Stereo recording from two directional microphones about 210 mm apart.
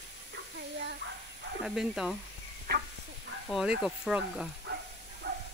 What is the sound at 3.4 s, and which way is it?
Speech, centre (ahead or behind).